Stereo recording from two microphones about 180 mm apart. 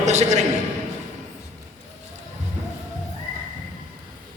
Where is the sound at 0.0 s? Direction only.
40° right (ahead or behind).